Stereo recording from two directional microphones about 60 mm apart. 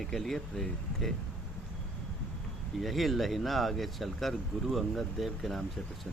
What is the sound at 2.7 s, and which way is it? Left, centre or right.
Speech, centre.